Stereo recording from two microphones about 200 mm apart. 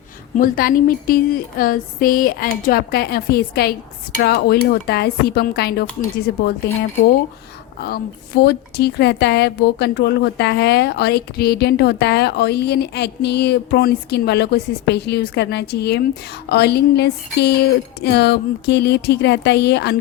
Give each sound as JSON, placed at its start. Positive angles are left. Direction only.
{"t": 0.3, "sound": "a woman's voice", "side_deg": 45}
{"t": 7.8, "sound": "a woman's voice", "side_deg": 50}